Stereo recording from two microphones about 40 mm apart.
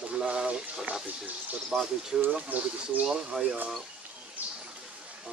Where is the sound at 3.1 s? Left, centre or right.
Centre.